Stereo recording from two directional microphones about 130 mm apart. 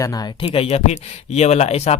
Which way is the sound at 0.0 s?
25° left (ahead or behind).